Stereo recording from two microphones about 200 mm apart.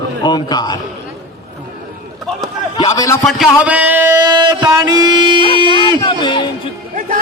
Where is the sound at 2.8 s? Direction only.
15° left (ahead or behind).